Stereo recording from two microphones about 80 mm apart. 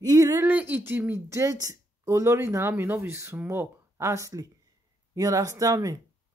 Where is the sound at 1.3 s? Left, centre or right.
Right.